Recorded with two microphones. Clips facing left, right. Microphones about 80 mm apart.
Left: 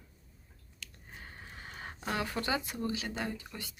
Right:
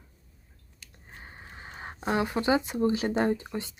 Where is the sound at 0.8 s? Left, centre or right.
Right.